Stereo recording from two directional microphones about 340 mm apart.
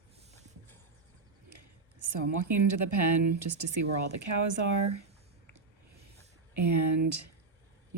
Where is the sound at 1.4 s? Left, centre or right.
Right.